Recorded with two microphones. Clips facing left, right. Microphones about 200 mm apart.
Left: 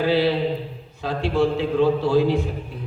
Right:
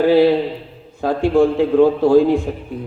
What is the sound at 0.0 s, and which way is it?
A man's voice, 50° right (ahead or behind).